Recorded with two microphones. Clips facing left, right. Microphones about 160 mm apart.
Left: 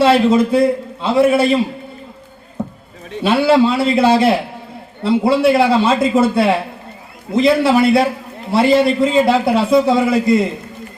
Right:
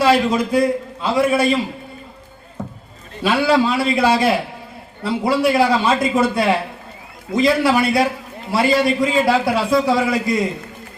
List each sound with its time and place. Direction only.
0.0 s a man's voice: 25° left (ahead or behind)
3.2 s a man's voice: 25° left (ahead or behind)